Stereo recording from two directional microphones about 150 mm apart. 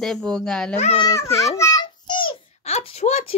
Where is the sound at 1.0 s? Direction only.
20° left (ahead or behind).